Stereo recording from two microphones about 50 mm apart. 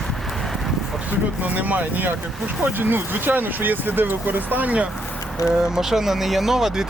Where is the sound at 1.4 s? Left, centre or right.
Right.